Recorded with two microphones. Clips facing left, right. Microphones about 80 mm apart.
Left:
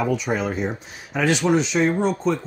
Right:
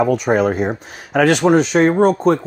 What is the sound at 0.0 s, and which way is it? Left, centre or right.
Speech, right.